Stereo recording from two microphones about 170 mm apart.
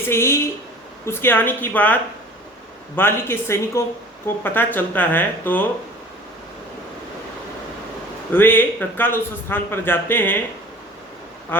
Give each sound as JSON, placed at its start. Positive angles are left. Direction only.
{"t": 0.1, "sound": "a man's voice", "side_deg": 15}
{"t": 8.3, "sound": "a man's voice", "side_deg": 10}